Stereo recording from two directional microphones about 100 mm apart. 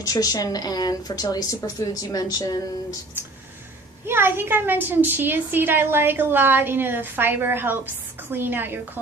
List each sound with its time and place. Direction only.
0.0 s a woman's voice: 35° left (ahead or behind)
4.0 s a woman's voice: 25° right (ahead or behind)